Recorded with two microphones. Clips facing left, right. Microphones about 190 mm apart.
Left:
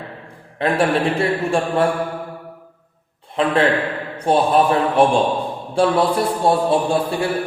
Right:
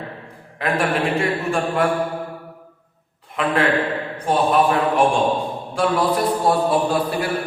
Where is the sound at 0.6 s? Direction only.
30° left (ahead or behind).